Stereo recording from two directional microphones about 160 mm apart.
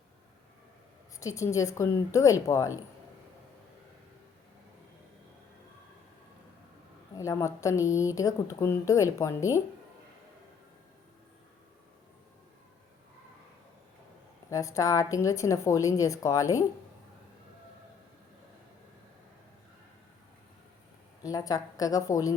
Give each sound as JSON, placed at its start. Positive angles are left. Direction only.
{"t": 1.2, "sound": "a woman's voice", "side_deg": 20}
{"t": 7.2, "sound": "a woman's voice", "side_deg": 20}
{"t": 14.5, "sound": "a woman's voice", "side_deg": 20}
{"t": 21.2, "sound": "a woman's voice", "side_deg": 20}